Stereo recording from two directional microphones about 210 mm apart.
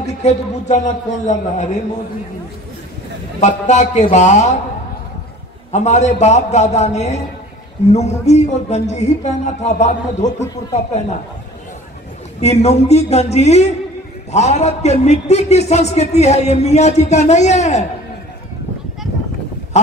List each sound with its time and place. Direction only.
0.0 s a man's voice: 30° left (ahead or behind)
3.3 s a man's voice: 35° left (ahead or behind)
5.7 s a man's voice: 35° left (ahead or behind)
12.4 s a man's voice: 30° left (ahead or behind)